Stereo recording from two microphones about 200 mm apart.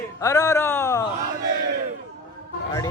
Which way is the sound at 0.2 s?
15° left (ahead or behind).